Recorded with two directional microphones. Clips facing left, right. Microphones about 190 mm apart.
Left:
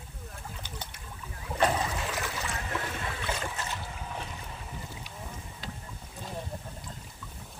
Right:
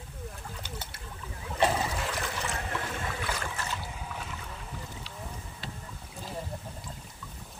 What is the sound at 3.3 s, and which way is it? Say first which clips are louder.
Boat: left 1 dB; 20° left (ahead or behind).